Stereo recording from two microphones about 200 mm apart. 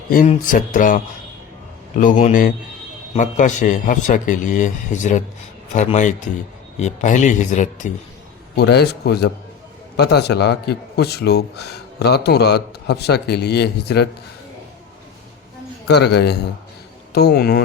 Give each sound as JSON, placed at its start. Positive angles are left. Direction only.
{"t": 0.1, "sound": "a man's voice", "side_deg": 45}
{"t": 8.5, "sound": "a man's voice", "side_deg": 55}
{"t": 15.9, "sound": "a man's voice", "side_deg": 55}